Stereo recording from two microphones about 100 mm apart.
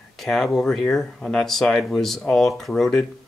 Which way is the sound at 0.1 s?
Centre (ahead or behind).